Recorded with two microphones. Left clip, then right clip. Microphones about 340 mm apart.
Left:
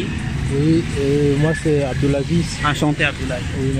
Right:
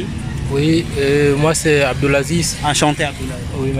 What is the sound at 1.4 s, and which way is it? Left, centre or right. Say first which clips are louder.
Speech: right 5 dB; right.